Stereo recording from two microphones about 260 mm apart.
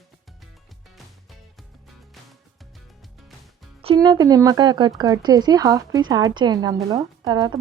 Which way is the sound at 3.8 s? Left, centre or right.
Centre.